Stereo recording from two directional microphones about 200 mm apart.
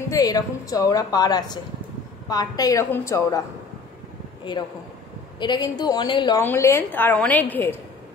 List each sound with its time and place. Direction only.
0.1 s a woman's voice: 15° left (ahead or behind)
5.4 s a woman's voice: 20° left (ahead or behind)
6.4 s a woman's voice: 10° left (ahead or behind)